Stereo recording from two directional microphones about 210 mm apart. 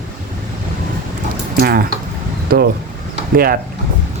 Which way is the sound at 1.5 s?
45° right (ahead or behind).